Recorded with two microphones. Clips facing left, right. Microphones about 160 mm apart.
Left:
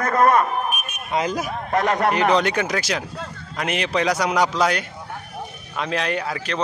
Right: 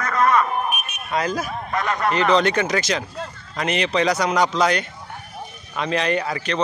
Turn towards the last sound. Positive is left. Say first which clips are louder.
# right 2 dB
turn(degrees=0)  # may be behind; listen again after turning